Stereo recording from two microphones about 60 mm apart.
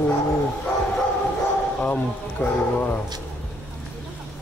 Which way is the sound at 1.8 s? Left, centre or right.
Left.